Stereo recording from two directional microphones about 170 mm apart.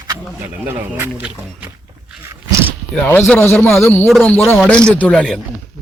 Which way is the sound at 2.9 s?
10° left (ahead or behind).